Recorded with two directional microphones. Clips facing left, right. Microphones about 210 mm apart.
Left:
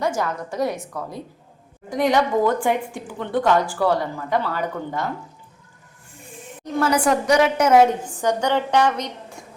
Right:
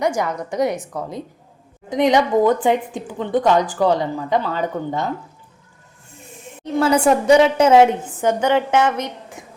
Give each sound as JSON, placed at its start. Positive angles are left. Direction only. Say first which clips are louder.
{"t": 0.0, "sound": "a woman's voice", "louder": "right 3 dB", "side_deg": -15}
{"t": 1.9, "sound": "a woman's voice", "louder": "right 3 dB", "side_deg": -20}
{"t": 6.6, "sound": "a woman's voice", "louder": "right 4 dB", "side_deg": -25}